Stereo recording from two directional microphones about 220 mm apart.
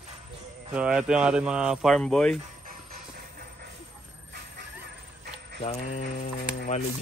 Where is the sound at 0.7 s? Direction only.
5° right (ahead or behind).